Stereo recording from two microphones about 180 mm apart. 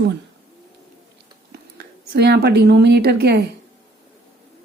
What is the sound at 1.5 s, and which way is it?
Speech, 65° right (ahead or behind).